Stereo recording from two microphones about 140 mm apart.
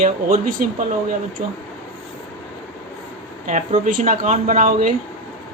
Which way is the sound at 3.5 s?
60° right (ahead or behind).